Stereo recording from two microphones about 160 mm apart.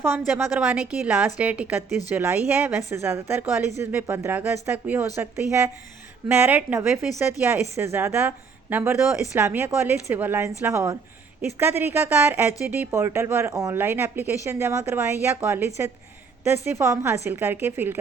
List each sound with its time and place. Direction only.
0.3 s speech: 10° right (ahead or behind)